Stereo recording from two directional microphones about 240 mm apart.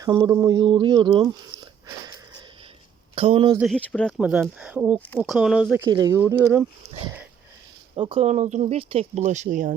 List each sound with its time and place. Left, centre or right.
0.0 s speech: centre
3.2 s speech: right
3.6 s speech: centre
4.9 s speech: centre
5.8 s speech: centre
7.9 s speech: right